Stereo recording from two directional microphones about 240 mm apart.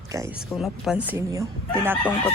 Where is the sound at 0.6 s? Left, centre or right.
Centre.